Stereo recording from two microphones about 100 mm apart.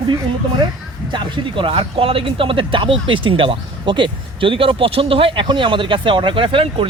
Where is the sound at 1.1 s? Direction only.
55° right (ahead or behind).